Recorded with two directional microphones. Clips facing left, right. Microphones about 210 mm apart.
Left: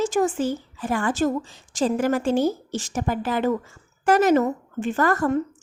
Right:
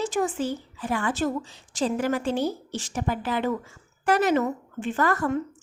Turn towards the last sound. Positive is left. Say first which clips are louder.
# left 3 dB
turn(degrees=45)  # may be behind; listen again after turning